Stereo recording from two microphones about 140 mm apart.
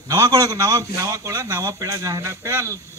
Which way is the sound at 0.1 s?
25° right (ahead or behind).